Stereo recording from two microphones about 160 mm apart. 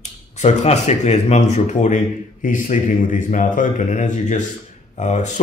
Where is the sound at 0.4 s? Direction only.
45° left (ahead or behind).